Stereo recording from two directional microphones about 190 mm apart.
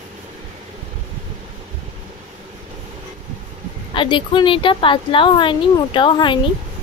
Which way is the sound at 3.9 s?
25° left (ahead or behind).